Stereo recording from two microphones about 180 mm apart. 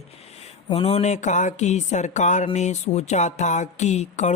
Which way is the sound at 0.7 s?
35° left (ahead or behind).